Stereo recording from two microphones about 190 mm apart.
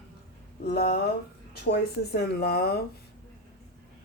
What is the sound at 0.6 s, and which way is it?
Speech, 55° left (ahead or behind).